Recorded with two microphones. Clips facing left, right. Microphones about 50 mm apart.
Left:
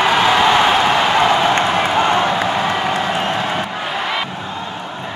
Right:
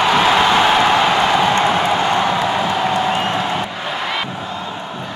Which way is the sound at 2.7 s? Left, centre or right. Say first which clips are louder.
Right 1 dB; left.